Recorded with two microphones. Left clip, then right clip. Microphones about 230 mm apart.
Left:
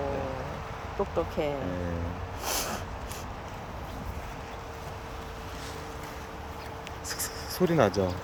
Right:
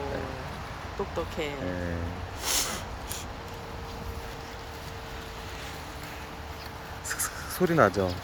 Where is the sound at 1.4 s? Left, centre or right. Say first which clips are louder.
Left 2 dB; left.